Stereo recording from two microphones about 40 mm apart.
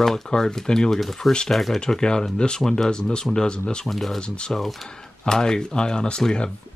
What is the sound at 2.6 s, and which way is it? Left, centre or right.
Speech, centre.